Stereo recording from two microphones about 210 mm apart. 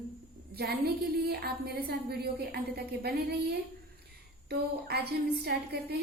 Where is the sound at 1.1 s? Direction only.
50° right (ahead or behind).